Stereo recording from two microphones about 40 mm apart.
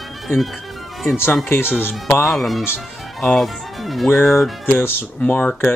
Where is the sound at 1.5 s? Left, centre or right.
Left.